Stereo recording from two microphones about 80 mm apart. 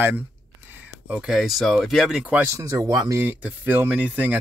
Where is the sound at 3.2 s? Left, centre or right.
Right.